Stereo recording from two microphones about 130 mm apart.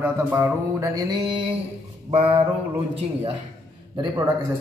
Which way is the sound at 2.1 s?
45° right (ahead or behind).